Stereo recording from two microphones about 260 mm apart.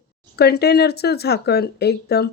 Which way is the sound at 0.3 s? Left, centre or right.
Left.